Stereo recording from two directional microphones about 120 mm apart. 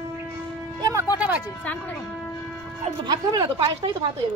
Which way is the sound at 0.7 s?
30° right (ahead or behind).